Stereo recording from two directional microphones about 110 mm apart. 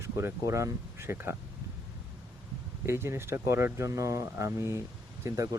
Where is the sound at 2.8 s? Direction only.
25° right (ahead or behind).